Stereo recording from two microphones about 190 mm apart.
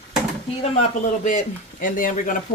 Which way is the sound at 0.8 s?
40° left (ahead or behind).